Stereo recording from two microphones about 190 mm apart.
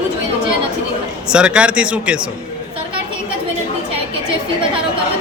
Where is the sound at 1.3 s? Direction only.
5° right (ahead or behind).